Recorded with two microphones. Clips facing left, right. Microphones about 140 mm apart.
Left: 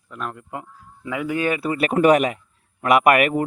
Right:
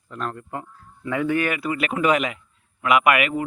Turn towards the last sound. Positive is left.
turn(degrees=45)  # may be behind; listen again after turning